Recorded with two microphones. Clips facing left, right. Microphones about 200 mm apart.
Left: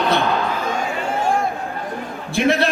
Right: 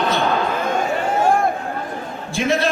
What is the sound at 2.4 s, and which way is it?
Speech, 60° left (ahead or behind).